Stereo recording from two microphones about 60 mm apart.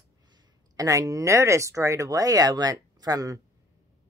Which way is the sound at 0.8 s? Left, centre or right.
Right.